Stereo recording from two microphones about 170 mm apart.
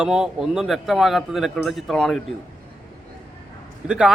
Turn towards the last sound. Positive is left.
turn(degrees=-5)  # may be behind; listen again after turning